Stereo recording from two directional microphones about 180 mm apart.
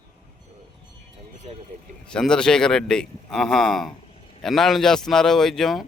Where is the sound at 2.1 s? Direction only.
5° left (ahead or behind).